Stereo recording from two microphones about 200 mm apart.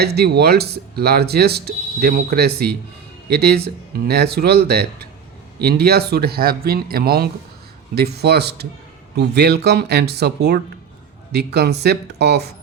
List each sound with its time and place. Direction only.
0.0 s speech: 55° right (ahead or behind)